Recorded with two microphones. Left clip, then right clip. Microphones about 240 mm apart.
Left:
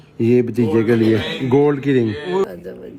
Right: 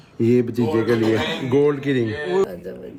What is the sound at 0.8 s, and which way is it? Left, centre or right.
A man's voice, left.